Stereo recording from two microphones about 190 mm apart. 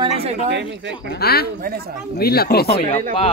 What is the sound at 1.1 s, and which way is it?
Speech, 55° left (ahead or behind).